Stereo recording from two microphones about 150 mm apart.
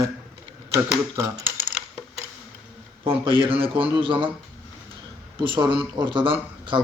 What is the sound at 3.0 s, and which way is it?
Speech, 35° right (ahead or behind).